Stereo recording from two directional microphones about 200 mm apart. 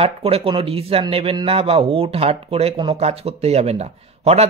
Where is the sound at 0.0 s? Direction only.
30° right (ahead or behind).